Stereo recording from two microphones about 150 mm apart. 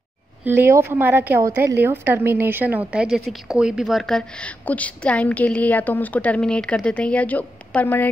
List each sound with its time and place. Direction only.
0.5 s a woman's voice: 15° right (ahead or behind); by 8.1 s 10° left (ahead or behind)